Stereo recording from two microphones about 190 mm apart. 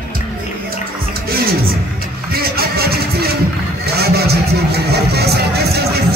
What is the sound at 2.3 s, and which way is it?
Music, 55° right (ahead or behind).